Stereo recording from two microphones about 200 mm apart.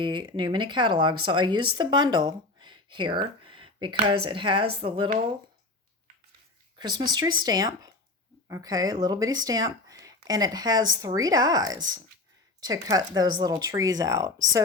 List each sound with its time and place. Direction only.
0.0 s speech: 25° right (ahead or behind)
6.7 s speech: 20° right (ahead or behind)